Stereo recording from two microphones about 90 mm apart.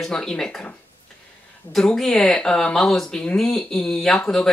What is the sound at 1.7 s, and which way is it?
Speech, 5° left (ahead or behind).